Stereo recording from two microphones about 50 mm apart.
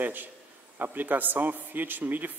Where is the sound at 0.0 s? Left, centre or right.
Right.